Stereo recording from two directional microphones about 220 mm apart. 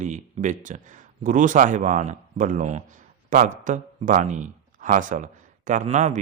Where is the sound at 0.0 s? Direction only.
35° right (ahead or behind).